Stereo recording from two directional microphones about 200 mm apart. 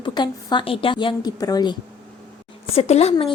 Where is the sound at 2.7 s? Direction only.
30° left (ahead or behind).